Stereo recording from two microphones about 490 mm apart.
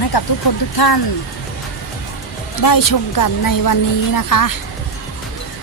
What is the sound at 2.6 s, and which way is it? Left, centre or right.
Speech, left.